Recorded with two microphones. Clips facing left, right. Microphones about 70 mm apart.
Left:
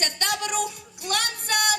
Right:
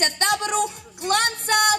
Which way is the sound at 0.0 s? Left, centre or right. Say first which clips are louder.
Right 5 dB; right.